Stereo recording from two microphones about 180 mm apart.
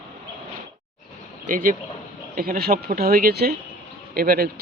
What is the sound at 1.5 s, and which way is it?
Speech, 50° right (ahead or behind).